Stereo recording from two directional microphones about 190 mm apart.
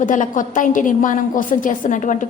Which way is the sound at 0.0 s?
45° left (ahead or behind).